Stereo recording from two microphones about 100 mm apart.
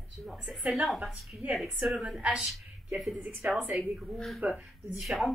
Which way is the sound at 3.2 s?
15° right (ahead or behind).